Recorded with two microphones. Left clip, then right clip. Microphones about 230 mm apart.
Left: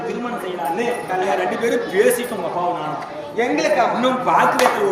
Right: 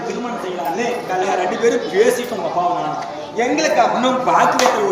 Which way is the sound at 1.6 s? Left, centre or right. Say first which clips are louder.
Right 2 dB; left.